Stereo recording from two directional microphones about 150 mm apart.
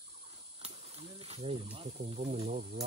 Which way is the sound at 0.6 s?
40° right (ahead or behind).